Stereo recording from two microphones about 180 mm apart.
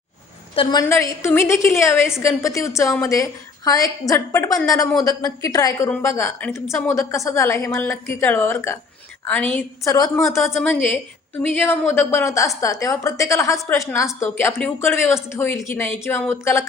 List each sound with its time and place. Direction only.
0.5 s a woman's voice: 25° left (ahead or behind)